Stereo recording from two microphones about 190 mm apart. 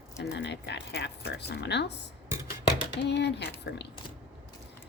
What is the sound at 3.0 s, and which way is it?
Speech, 65° left (ahead or behind).